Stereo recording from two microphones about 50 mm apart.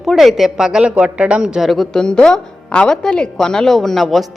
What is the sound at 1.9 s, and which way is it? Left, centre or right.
A woman's voice, centre.